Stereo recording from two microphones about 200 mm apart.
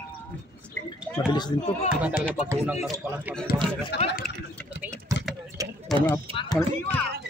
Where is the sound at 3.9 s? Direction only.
55° left (ahead or behind).